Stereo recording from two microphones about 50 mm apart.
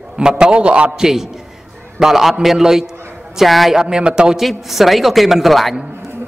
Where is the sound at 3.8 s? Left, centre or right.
Centre.